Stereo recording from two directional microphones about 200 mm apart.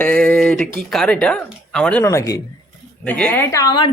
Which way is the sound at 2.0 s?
15° left (ahead or behind).